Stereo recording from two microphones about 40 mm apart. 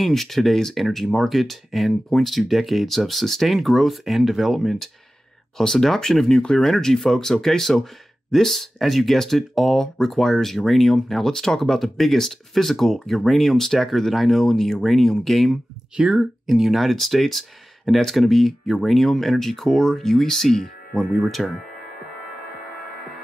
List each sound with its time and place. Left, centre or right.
0.0 s speech: centre
6.3 s speech: left
6.6 s speech: centre
16.0 s speech: right
16.4 s speech: centre